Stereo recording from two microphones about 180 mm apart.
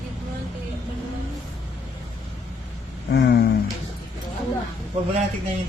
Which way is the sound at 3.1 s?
75° left (ahead or behind).